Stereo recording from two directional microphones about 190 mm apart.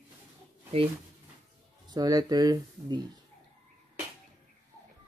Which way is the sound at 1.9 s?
20° right (ahead or behind).